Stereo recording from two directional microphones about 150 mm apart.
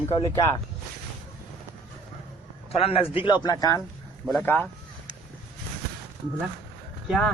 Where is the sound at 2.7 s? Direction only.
40° left (ahead or behind).